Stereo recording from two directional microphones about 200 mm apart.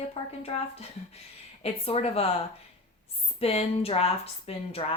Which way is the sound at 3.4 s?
30° left (ahead or behind).